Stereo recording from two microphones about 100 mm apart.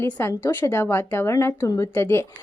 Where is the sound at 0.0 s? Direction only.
20° left (ahead or behind).